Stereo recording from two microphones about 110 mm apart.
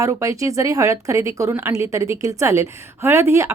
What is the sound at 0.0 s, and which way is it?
A woman's voice, 30° right (ahead or behind).